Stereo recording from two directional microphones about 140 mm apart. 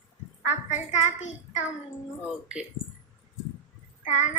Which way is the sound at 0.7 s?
60° left (ahead or behind).